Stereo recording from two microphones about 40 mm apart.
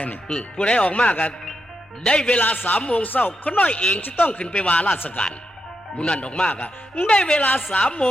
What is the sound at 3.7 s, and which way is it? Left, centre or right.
Speech, left.